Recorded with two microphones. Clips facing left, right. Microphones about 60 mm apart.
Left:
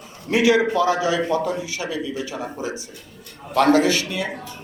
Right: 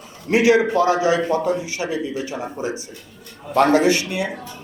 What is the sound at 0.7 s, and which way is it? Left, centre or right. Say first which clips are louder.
A man's voice: right 2 dB; right.